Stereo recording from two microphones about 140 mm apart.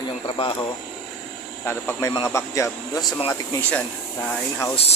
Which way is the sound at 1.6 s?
15° left (ahead or behind).